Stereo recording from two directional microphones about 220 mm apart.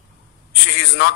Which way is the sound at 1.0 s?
50° left (ahead or behind).